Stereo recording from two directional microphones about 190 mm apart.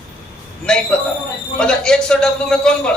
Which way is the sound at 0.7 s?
5° left (ahead or behind).